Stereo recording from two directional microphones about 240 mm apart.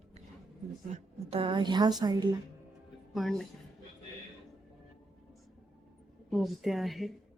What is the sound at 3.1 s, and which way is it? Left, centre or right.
Speech, centre.